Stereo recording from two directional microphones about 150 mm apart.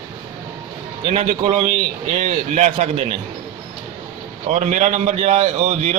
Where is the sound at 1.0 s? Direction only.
45° right (ahead or behind).